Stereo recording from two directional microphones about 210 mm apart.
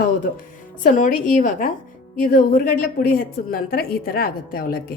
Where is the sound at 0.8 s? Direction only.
40° left (ahead or behind).